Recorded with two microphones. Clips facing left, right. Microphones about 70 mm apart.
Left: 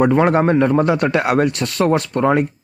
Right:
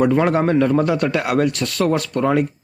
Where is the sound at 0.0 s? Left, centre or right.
Left.